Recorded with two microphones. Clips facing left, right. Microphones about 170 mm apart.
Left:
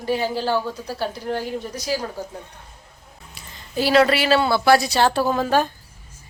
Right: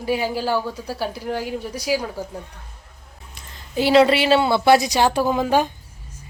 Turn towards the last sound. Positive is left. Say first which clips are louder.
# right 1 dB
turn(degrees=-15)  # may be behind; listen again after turning